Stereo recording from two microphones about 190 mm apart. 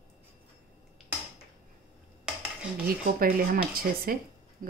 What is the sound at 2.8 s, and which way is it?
Speech, 50° right (ahead or behind).